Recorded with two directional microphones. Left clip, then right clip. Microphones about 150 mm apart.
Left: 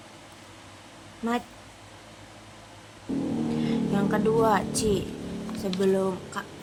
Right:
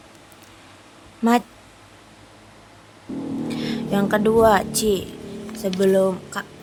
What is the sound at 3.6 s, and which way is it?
Music, 65° right (ahead or behind).